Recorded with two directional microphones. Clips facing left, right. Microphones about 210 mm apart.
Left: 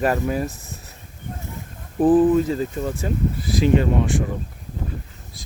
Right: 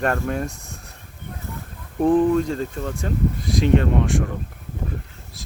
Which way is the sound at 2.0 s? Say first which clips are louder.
Left 2 dB; 5° left (ahead or behind).